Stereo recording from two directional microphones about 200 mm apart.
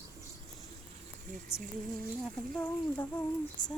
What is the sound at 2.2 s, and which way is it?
Speech, 5° left (ahead or behind).